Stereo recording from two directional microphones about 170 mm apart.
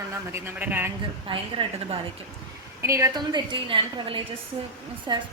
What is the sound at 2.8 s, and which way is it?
A woman's voice, 20° right (ahead or behind).